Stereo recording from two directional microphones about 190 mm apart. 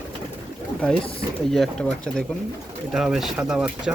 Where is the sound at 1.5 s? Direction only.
Centre (ahead or behind).